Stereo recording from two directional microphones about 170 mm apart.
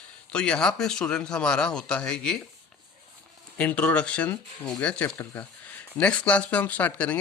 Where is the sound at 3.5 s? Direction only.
10° left (ahead or behind).